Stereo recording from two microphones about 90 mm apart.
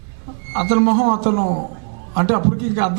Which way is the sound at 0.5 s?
15° right (ahead or behind).